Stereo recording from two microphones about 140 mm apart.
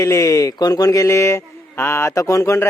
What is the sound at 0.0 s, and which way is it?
A man's voice, 20° left (ahead or behind).